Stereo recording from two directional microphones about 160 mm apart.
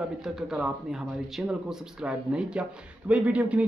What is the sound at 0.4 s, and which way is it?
Speech, 5° right (ahead or behind).